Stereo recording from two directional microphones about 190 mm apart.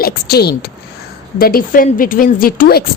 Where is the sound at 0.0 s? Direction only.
55° left (ahead or behind).